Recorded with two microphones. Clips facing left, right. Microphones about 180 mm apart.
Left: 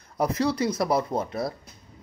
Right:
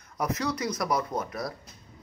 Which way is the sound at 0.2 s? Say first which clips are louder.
Left 5 dB; 30° left (ahead or behind).